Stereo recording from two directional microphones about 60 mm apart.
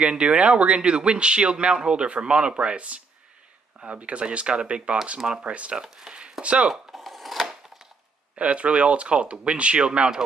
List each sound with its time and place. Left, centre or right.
0.0 s a man's voice: centre
6.7 s a sound: centre
8.4 s speech: right